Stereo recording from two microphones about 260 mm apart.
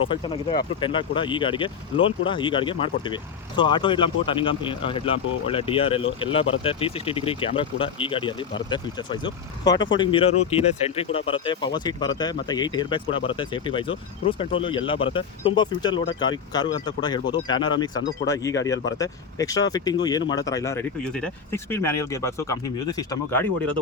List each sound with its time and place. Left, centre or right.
0.8 s speech: centre
9.9 s speech: centre